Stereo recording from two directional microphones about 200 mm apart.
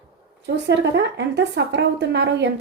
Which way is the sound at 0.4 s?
60° right (ahead or behind).